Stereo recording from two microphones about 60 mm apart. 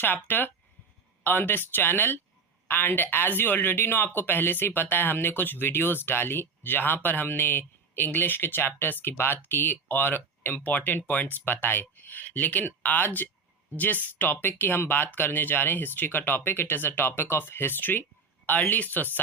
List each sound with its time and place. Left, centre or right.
0.0 s speech: left